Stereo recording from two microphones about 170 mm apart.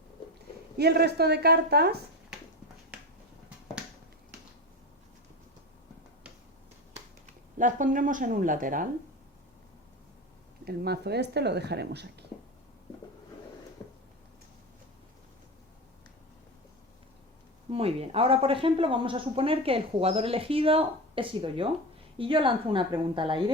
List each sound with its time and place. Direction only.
0.8 s speech: 70° right (ahead or behind)
7.6 s speech: 50° right (ahead or behind)
10.7 s speech: 70° right (ahead or behind)
17.7 s a woman's voice: 35° right (ahead or behind)